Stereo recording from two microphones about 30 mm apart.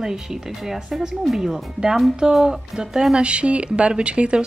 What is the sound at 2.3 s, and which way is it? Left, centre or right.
Speech, right.